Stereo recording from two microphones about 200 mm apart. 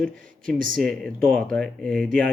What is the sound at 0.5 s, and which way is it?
Speech, 45° right (ahead or behind).